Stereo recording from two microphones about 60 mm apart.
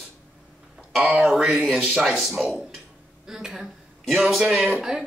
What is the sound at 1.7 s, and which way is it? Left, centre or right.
Speech, centre.